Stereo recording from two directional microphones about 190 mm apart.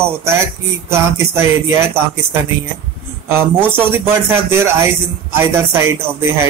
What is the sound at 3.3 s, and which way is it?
Speech, 10° right (ahead or behind).